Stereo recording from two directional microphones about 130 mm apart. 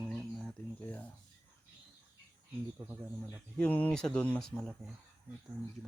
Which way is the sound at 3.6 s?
10° left (ahead or behind).